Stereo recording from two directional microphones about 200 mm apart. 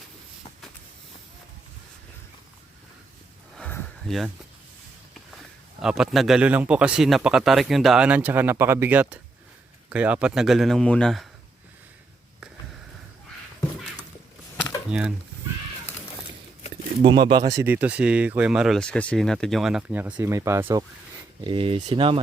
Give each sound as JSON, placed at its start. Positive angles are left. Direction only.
{"t": 3.6, "sound": "a sound", "side_deg": 5}
{"t": 5.8, "sound": "speech", "side_deg": 0}
{"t": 14.8, "sound": "speech", "side_deg": -5}
{"t": 17.1, "sound": "speech", "side_deg": -25}
{"t": 21.4, "sound": "speech", "side_deg": -25}